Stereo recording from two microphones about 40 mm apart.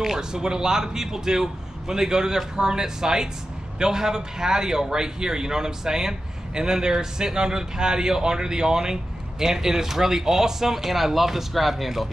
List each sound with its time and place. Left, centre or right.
0.0 s a man's voice: centre